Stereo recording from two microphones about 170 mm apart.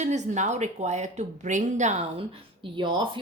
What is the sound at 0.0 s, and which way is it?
A woman's voice, 45° right (ahead or behind).